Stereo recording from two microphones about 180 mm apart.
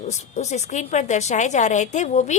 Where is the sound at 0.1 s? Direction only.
40° left (ahead or behind).